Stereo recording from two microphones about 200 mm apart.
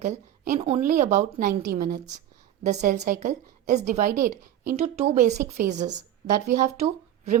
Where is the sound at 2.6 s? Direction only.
35° right (ahead or behind).